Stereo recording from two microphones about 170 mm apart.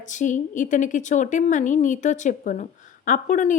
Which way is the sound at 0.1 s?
45° left (ahead or behind).